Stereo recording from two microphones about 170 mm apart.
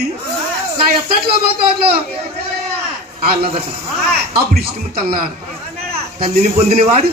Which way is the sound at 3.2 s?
65° right (ahead or behind).